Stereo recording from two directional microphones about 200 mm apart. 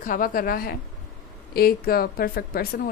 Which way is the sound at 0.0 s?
45° left (ahead or behind).